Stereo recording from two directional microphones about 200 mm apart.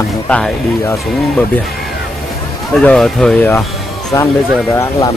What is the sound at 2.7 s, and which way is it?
Speech, 5° left (ahead or behind).